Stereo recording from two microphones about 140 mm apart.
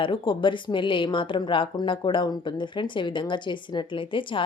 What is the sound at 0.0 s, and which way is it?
Speech, 35° left (ahead or behind).